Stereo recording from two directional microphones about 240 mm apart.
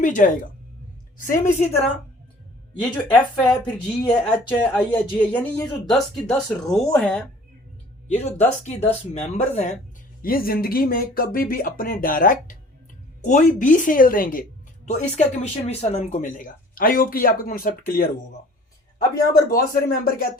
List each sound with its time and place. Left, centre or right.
0.0 s speech: left
1.5 s speech: left
2.8 s speech: centre
8.2 s speech: left
18.9 s speech: centre
19.5 s speech: left